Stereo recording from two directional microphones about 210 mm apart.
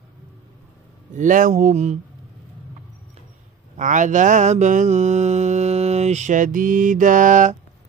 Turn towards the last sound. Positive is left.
turn(degrees=-35)  # may be behind; listen again after turning